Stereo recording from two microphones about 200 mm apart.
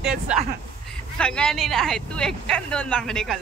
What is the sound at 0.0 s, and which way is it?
Speech, 5° right (ahead or behind).